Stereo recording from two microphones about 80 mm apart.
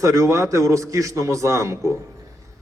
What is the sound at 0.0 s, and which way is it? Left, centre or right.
A man's voice, right.